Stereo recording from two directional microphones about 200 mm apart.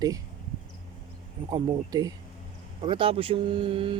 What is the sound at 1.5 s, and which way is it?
Speech, 20° right (ahead or behind).